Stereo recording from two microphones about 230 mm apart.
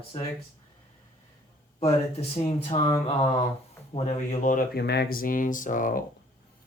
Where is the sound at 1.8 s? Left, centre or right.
Left.